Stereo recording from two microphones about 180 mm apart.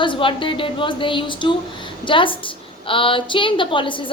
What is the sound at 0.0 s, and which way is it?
A woman's voice, 30° left (ahead or behind).